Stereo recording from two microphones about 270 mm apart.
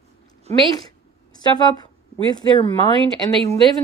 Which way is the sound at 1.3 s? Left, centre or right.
Centre.